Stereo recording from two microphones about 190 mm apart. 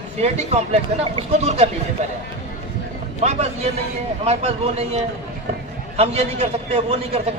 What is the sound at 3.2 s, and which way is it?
A man's voice, 35° right (ahead or behind).